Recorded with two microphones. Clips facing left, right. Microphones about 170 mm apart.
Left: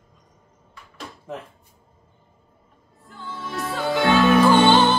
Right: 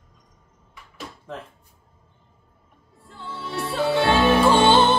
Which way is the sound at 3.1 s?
25° right (ahead or behind).